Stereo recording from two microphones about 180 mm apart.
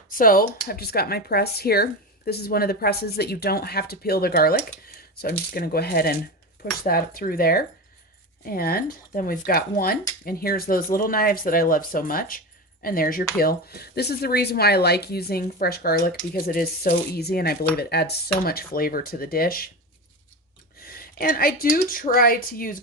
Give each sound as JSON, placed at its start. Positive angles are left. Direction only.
{"t": 0.1, "sound": "speech", "side_deg": 50}
{"t": 20.8, "sound": "speech", "side_deg": 55}